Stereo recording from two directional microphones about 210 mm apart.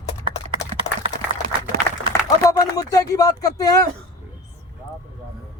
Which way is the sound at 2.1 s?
15° left (ahead or behind).